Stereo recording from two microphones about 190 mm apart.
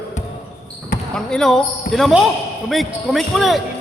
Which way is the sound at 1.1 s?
5° left (ahead or behind).